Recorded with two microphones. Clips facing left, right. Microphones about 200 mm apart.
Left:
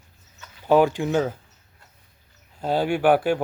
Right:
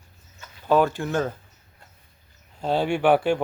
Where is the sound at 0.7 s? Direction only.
15° left (ahead or behind).